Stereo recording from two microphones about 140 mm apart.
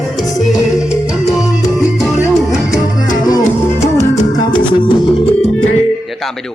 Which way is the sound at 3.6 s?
20° left (ahead or behind).